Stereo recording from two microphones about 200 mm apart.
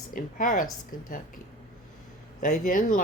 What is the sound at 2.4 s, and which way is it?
Speech, 45° left (ahead or behind).